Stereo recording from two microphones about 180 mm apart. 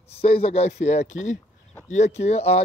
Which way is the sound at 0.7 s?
75° left (ahead or behind).